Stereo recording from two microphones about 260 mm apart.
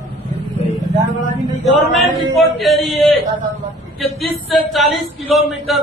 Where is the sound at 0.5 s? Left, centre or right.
Left.